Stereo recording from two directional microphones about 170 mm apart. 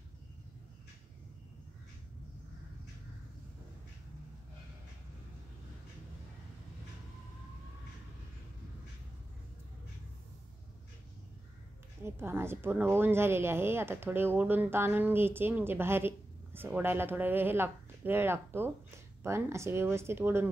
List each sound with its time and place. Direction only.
12.0 s a woman's voice: 15° right (ahead or behind)